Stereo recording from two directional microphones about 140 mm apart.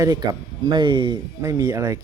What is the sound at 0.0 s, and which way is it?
Speech, 30° right (ahead or behind).